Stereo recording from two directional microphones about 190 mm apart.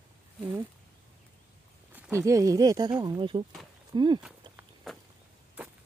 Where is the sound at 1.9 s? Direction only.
10° right (ahead or behind).